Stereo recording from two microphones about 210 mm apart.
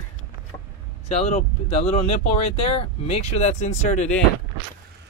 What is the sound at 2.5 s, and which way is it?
Speech, 25° left (ahead or behind).